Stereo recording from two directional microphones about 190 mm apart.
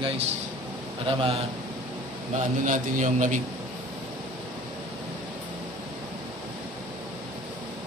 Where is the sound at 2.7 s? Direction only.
40° right (ahead or behind).